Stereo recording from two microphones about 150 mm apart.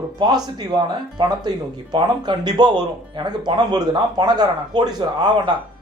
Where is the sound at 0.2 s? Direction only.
30° right (ahead or behind).